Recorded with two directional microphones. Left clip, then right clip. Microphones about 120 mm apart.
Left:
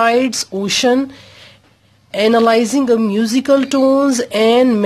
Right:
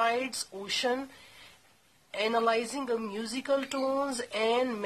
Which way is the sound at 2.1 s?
45° left (ahead or behind).